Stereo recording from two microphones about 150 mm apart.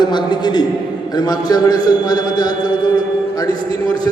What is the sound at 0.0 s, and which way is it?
A man's voice, 30° left (ahead or behind).